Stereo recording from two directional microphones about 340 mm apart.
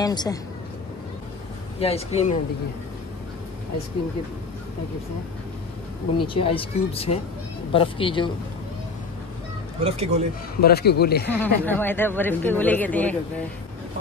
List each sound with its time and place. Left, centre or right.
0.0 s speech: centre
1.8 s speech: centre
6.1 s speech: centre
9.8 s speech: centre
10.6 s a man's voice: left
11.3 s speech: centre